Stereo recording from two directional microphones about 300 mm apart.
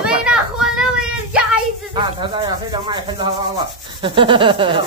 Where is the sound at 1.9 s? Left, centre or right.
Centre.